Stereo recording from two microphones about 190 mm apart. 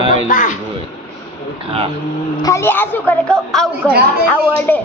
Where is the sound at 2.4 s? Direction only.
15° left (ahead or behind).